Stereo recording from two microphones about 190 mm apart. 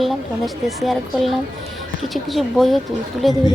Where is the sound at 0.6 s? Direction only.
Centre (ahead or behind).